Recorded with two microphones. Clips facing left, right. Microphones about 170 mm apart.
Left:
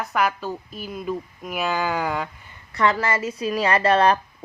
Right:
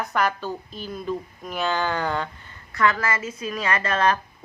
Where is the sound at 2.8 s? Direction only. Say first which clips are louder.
Left 2 dB; 30° left (ahead or behind).